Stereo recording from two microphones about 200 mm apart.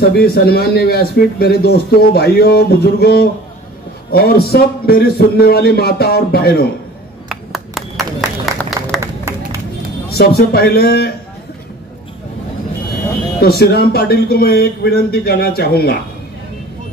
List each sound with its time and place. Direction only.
0.1 s a man's voice: 50° left (ahead or behind)
7.2 s clapping: centre (ahead or behind)
9.0 s crowd: 15° right (ahead or behind)
10.0 s a man's voice: 50° left (ahead or behind)
13.4 s a man's voice: 50° left (ahead or behind)